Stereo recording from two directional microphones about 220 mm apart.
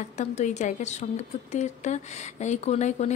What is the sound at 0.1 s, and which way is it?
A woman's voice, 30° left (ahead or behind).